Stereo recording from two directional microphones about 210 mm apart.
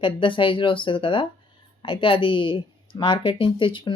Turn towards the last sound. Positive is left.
turn(degrees=20)  # may be behind; listen again after turning